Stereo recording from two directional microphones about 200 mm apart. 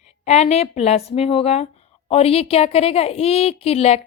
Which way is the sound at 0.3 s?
35° left (ahead or behind).